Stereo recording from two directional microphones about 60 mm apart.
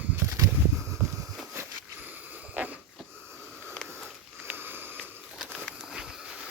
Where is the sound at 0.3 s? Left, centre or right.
Right.